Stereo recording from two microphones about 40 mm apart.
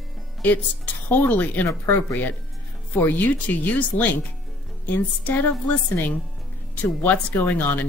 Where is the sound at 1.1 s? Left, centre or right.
Left.